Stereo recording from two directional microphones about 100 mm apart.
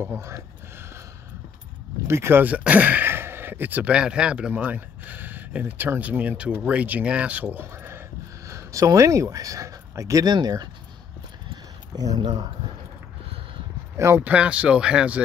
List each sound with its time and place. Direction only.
0.0 s speech: 25° right (ahead or behind)
2.0 s speech: 25° right (ahead or behind)
8.5 s speech: 30° right (ahead or behind)
11.5 s a sound: 40° right (ahead or behind)
13.9 s speech: 25° right (ahead or behind)
14.2 s speech: 10° right (ahead or behind)